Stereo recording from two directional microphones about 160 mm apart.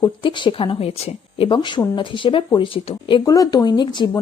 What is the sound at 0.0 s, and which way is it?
Speech, 30° left (ahead or behind).